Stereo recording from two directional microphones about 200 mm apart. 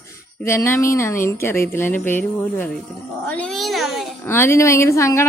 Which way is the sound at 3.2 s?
5° left (ahead or behind).